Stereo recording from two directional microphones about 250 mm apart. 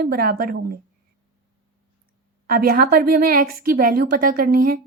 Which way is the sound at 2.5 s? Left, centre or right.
Right.